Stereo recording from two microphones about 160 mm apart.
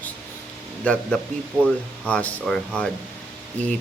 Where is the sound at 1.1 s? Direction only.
5° left (ahead or behind).